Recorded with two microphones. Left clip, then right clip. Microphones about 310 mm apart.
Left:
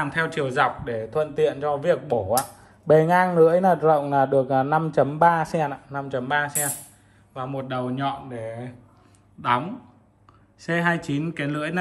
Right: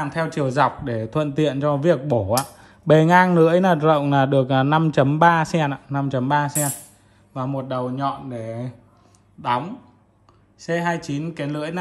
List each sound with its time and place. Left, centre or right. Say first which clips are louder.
0.0 s speech: right 1 dB; centre
3.1 s a man's voice: right 2 dB; left
6.0 s speech: right 3 dB; right
9.4 s speech: even; centre